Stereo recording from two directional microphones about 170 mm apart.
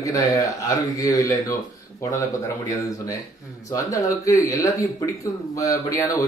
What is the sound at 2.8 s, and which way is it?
A man's voice, 20° left (ahead or behind).